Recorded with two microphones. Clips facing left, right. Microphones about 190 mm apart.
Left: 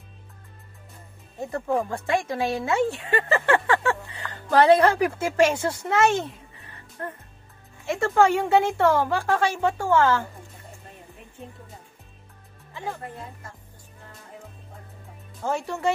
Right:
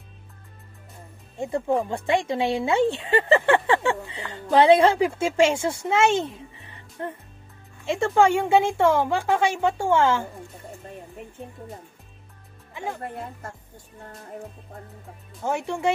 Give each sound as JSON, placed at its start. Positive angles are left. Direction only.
{"t": 1.4, "sound": "speech", "side_deg": -15}
{"t": 12.7, "sound": "speech", "side_deg": -15}
{"t": 15.4, "sound": "speech", "side_deg": -20}